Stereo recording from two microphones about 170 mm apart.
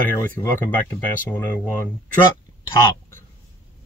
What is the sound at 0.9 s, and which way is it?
Speech, 10° left (ahead or behind).